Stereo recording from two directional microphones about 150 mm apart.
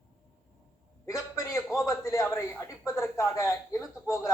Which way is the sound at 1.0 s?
20° left (ahead or behind).